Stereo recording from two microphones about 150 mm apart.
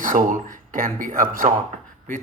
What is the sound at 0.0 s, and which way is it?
Speech, 60° right (ahead or behind).